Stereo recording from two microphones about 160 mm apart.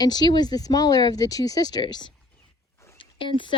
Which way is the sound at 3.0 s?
30° left (ahead or behind).